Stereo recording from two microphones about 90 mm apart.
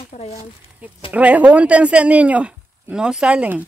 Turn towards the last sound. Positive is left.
turn(degrees=-15)  # may be behind; listen again after turning